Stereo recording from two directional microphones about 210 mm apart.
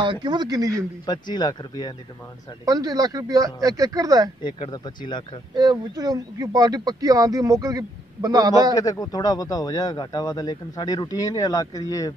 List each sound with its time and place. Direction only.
0.0 s speech: 20° right (ahead or behind)
1.0 s speech: 20° left (ahead or behind)
2.6 s speech: 15° right (ahead or behind)
4.4 s speech: 20° left (ahead or behind)
5.5 s speech: 20° right (ahead or behind)
8.7 s speech: 15° left (ahead or behind)